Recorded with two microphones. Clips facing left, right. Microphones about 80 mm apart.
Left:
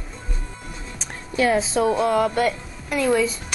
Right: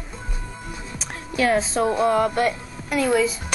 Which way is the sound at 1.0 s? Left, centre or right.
Centre.